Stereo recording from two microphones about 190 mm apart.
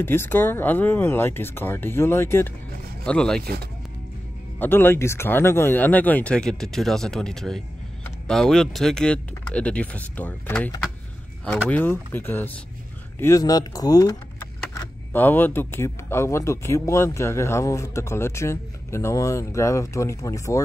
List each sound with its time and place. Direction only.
0.0 s speech: 10° left (ahead or behind)
4.6 s speech: 10° left (ahead or behind)